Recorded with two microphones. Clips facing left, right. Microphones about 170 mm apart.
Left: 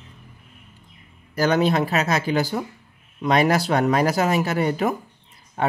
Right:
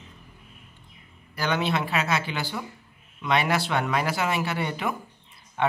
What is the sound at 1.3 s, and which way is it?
Speech, 40° left (ahead or behind).